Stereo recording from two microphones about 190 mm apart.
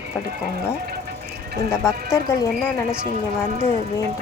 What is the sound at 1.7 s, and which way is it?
Speech, 15° left (ahead or behind).